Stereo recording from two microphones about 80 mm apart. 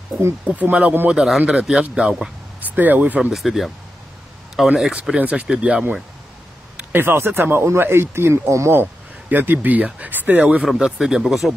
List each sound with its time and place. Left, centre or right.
0.5 s speech: centre
2.6 s speech: right
3.3 s speech: centre
6.8 s speech: right
9.3 s speech: right; by 11.5 s centre